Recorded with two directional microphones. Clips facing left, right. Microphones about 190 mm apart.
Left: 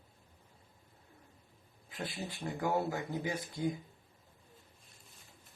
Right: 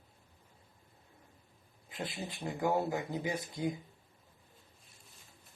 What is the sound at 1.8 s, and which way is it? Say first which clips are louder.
Speech: right 1 dB; 20° right (ahead or behind).